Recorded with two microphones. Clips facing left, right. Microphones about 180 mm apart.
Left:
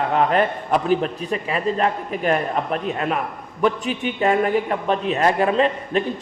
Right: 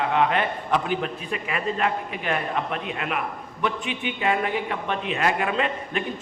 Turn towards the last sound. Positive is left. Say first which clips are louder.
# left 7 dB
turn(degrees=35)  # may be behind; listen again after turning